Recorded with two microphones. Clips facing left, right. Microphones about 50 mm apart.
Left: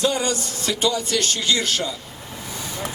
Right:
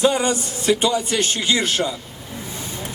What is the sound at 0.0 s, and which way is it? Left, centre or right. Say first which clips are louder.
A man's voice: right 4 dB; right.